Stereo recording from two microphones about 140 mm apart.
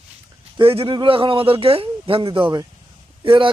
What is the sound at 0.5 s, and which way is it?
A man's voice, 40° right (ahead or behind).